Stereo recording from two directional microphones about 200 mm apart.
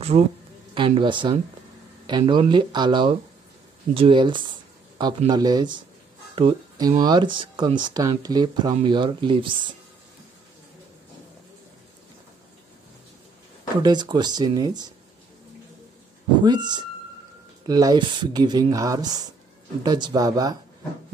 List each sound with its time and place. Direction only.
0.1 s speech: 35° right (ahead or behind)
0.7 s speech: 25° right (ahead or behind)
13.8 s speech: 20° right (ahead or behind)
16.4 s speech: 20° right (ahead or behind)